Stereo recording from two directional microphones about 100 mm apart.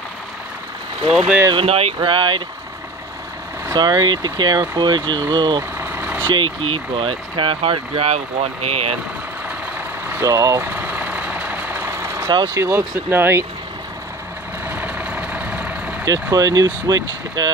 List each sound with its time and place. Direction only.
1.5 s speech: 75° right (ahead or behind)
2.0 s speech: 55° right (ahead or behind)
3.7 s speech: 45° right (ahead or behind)
5.6 s vehicle: 20° right (ahead or behind)
6.3 s speech: 60° right (ahead or behind); by 8.9 s 90° right
10.2 s speech: 35° right (ahead or behind)
10.7 s vehicle: 15° right (ahead or behind)
12.4 s speech: 30° right (ahead or behind)
14.7 s vehicle: 15° right (ahead or behind)
16.1 s speech: 35° right (ahead or behind)